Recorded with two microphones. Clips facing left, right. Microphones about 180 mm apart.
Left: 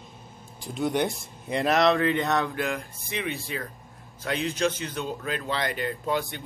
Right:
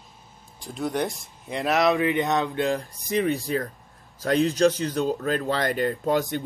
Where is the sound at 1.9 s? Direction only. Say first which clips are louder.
Right 1 dB; 15° right (ahead or behind).